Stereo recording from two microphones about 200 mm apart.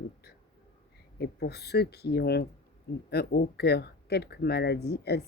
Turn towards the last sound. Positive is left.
turn(degrees=55)  # may be behind; listen again after turning